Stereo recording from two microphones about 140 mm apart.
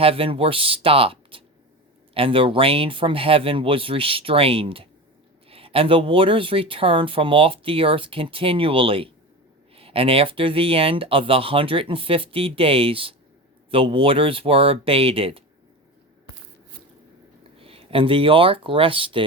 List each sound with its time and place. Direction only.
0.0 s speech: 40° right (ahead or behind)
17.6 s speech: 40° right (ahead or behind)